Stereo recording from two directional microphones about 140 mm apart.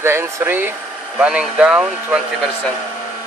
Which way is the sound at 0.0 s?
15° right (ahead or behind).